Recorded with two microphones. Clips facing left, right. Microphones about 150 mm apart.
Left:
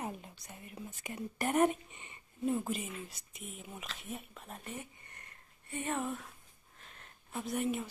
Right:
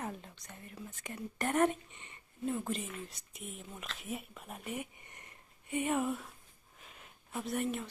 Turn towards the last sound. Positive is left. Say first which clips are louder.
# left 1 dB
turn(degrees=0)  # may be behind; listen again after turning